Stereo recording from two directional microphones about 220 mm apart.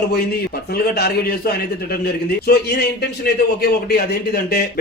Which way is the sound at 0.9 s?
45° left (ahead or behind).